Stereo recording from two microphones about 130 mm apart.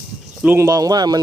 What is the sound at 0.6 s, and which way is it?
Speech, 25° right (ahead or behind).